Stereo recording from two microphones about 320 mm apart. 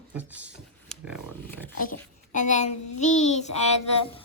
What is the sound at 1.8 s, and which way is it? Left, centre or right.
Speech, left.